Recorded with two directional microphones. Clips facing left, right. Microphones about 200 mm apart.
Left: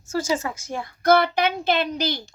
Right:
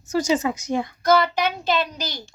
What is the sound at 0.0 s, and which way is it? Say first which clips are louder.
Speech: right 3 dB; 15° right (ahead or behind).